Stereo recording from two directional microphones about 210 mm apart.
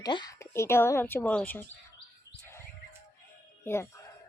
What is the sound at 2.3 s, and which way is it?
Chirp, 55° left (ahead or behind).